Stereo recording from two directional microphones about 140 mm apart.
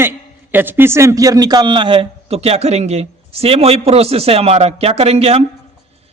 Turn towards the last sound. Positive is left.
turn(degrees=-45)  # may be behind; listen again after turning